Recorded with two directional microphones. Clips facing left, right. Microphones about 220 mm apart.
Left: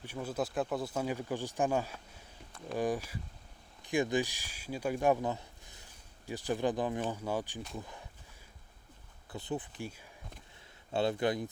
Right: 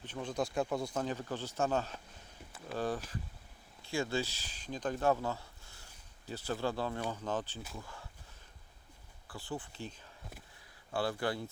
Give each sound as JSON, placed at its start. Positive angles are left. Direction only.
{"t": 0.0, "sound": "speech", "side_deg": 10}
{"t": 9.3, "sound": "speech", "side_deg": 20}
{"t": 10.9, "sound": "speech", "side_deg": 20}